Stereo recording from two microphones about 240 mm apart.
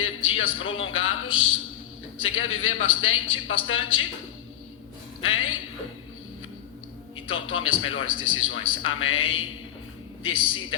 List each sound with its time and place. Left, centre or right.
0.0 s a man's voice: left
5.2 s speech: left
7.3 s a man's voice: left